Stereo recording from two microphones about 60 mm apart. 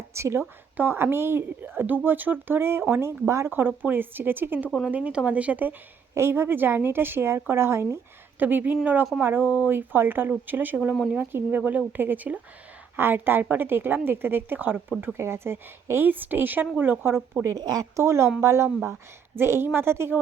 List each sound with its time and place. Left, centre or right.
0.1 s a woman's voice: right
0.8 s a woman's voice: right
3.8 s a woman's voice: right
4.9 s speech: right
6.1 s a woman's voice: right
8.4 s a woman's voice: right
17.4 s speech: right
17.9 s a woman's voice: right
19.4 s a woman's voice: right